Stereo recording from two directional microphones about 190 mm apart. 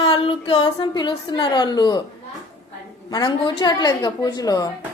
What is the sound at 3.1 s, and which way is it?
A woman's voice, 25° left (ahead or behind).